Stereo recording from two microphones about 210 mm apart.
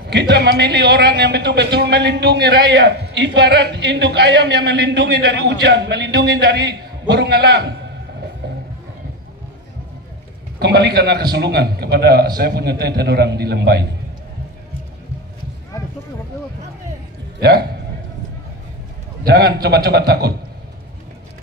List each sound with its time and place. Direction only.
0.1 s a man's voice: 55° right (ahead or behind)
10.6 s a man's voice: 55° right (ahead or behind)
19.2 s a man's voice: 45° right (ahead or behind)